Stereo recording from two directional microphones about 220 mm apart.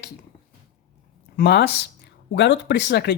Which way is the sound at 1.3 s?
50° left (ahead or behind).